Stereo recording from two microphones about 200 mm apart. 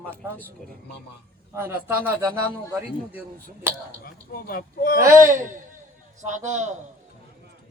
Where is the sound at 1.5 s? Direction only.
10° right (ahead or behind).